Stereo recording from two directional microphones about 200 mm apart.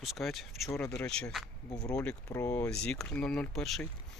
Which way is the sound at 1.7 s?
15° left (ahead or behind).